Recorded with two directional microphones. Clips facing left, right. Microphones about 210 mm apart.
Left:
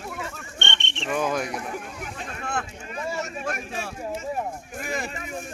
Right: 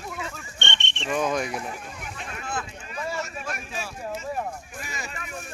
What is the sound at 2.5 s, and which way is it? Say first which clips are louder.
Speech: left 2 dB; 65° left (ahead or behind).